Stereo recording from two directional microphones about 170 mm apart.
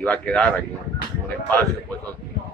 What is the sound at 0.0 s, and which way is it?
Speech, 5° left (ahead or behind).